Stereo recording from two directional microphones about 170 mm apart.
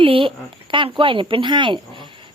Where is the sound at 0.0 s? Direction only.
30° right (ahead or behind).